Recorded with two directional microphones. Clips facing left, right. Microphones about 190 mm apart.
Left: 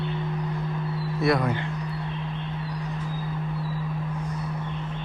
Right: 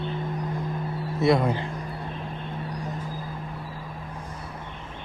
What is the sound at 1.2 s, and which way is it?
Speech, 25° right (ahead or behind).